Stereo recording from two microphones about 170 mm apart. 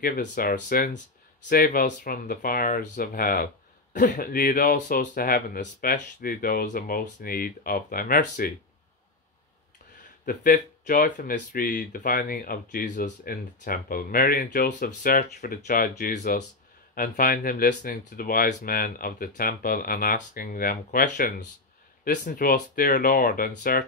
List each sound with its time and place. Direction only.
0.0 s speech: 60° left (ahead or behind)
10.2 s speech: 50° left (ahead or behind)
15.9 s speech: 45° left (ahead or behind)
16.9 s speech: 55° left (ahead or behind)